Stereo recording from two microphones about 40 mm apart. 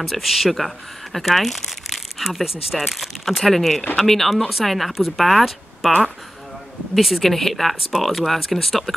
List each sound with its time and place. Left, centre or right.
0.0 s speech: centre
7.0 s speech: centre